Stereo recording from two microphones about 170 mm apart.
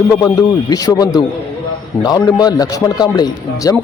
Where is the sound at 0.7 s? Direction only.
20° left (ahead or behind).